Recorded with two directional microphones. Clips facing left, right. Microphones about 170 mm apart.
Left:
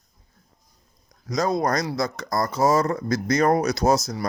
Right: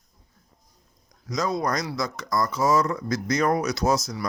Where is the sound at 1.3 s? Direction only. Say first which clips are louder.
Left 3 dB; 55° left (ahead or behind).